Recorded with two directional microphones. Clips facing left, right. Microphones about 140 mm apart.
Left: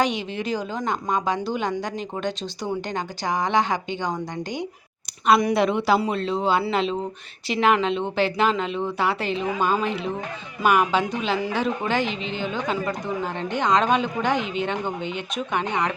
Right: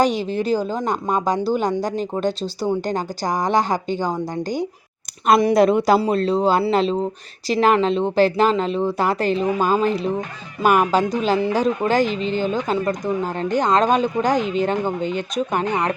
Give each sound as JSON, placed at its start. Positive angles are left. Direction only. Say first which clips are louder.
{"t": 0.0, "sound": "a woman's voice", "louder": "right 5 dB", "side_deg": -35}
{"t": 5.4, "sound": "a woman's voice", "louder": "right 6 dB", "side_deg": -35}